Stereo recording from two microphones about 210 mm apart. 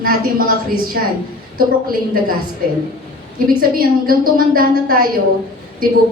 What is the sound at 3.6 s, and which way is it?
A woman's voice, 45° right (ahead or behind).